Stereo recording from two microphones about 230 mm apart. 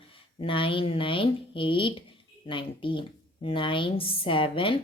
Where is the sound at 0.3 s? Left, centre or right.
Left.